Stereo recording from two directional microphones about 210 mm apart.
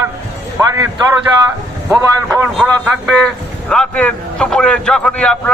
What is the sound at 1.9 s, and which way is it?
A man's voice, centre (ahead or behind).